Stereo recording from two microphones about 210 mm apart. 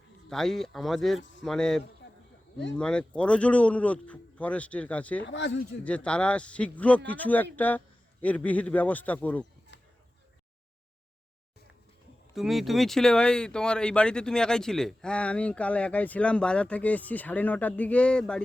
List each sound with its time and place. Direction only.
0.3 s speech: centre (ahead or behind)
1.2 s a man's voice: 60° left (ahead or behind)
1.5 s speech: 5° left (ahead or behind)
5.2 s speech: 60° left (ahead or behind)
5.8 s speech: 5° left (ahead or behind)
12.3 s speech: centre (ahead or behind)